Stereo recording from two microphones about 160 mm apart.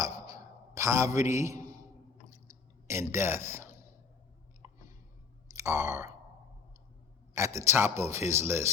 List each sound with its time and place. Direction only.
0.0 s a sound: 20° right (ahead or behind)
2.3 s drip: 20° right (ahead or behind)
5.5 s speech: 20° right (ahead or behind)
7.3 s speech: 20° right (ahead or behind)